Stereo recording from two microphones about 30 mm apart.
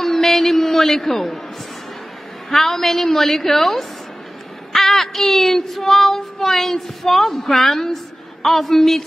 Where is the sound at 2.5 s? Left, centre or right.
Centre.